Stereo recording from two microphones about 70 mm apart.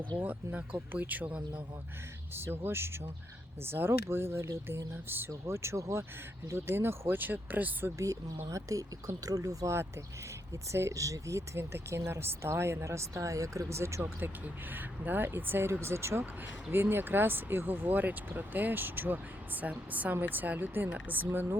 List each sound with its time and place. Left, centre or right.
0.2 s speech: right
2.3 s speech: right
5.0 s speech: right
5.3 s speech: right
7.9 s speech: right
14.0 s speech: right